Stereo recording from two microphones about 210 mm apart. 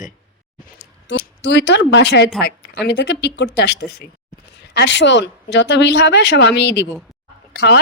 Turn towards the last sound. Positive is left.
turn(degrees=50)  # may be behind; listen again after turning